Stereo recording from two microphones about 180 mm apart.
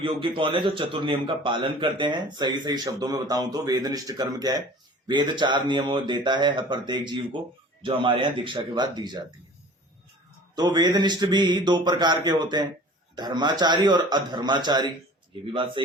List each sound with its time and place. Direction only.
0.0 s a man's voice: 30° right (ahead or behind)
10.5 s a man's voice: 20° right (ahead or behind)